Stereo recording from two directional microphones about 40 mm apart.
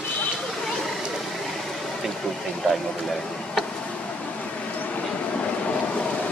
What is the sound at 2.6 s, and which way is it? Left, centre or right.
Speech, left.